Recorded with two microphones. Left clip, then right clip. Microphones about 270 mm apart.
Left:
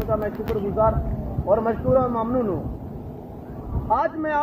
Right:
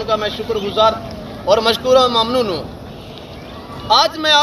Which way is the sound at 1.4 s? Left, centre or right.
Centre.